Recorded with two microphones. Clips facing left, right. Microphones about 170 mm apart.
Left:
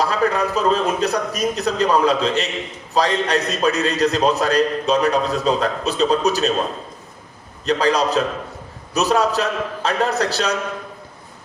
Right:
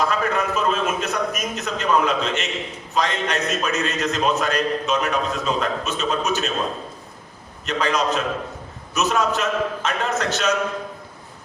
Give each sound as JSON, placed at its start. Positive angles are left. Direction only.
{"t": 0.0, "sound": "a man's voice", "side_deg": 35}
{"t": 7.6, "sound": "a man's voice", "side_deg": 35}